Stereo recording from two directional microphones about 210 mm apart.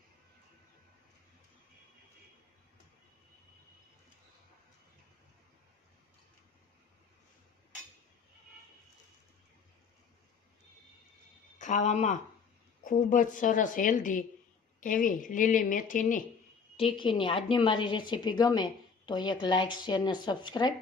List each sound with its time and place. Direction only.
11.6 s a woman's voice: 35° left (ahead or behind)
16.7 s a woman's voice: 25° left (ahead or behind)